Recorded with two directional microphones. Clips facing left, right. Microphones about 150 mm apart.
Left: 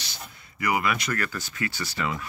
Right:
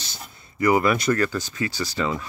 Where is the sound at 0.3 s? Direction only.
35° right (ahead or behind).